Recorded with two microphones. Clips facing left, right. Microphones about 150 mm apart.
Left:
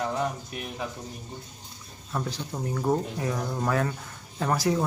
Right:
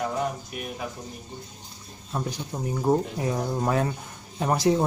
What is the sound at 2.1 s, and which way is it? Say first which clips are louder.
Speech: right 1 dB; 15° right (ahead or behind).